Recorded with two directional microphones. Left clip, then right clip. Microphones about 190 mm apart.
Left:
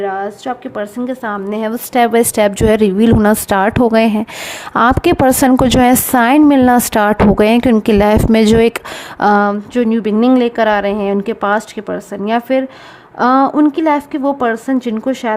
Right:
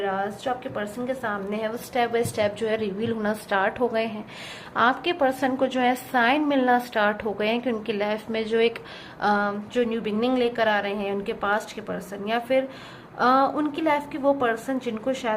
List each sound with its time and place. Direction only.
0.0 s a woman's voice: 50° left (ahead or behind); by 8.8 s 70° left (ahead or behind)
9.2 s a woman's voice: 55° left (ahead or behind); by 15.4 s 40° left (ahead or behind)